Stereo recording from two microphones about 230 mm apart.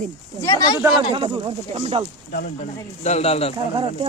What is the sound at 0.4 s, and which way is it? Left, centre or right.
Speech, centre.